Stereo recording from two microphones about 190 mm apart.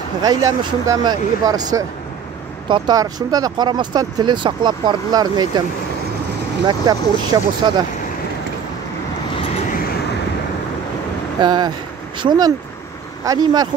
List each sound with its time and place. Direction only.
0.2 s speech: 20° right (ahead or behind)
6.6 s speech: 20° right (ahead or behind)
11.4 s speech: 25° right (ahead or behind)